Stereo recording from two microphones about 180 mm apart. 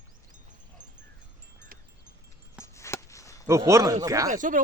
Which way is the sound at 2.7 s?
15° left (ahead or behind).